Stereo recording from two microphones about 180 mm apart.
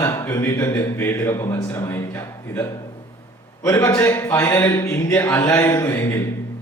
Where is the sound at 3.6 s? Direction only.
20° left (ahead or behind).